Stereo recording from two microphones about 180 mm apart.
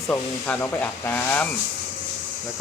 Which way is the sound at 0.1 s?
10° left (ahead or behind).